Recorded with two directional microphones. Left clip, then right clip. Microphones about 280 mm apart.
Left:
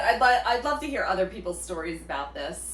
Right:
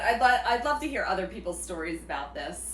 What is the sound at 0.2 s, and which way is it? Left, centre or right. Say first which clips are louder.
A woman's voice: left 2 dB; centre.